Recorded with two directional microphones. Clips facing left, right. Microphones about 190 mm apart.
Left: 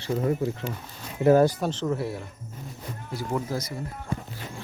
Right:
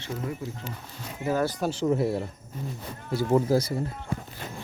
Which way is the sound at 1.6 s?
10° right (ahead or behind).